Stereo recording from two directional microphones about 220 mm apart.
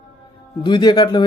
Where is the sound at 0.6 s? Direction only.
20° left (ahead or behind).